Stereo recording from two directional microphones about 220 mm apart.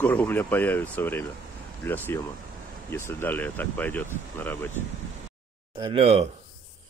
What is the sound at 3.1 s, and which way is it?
Speech, 10° left (ahead or behind).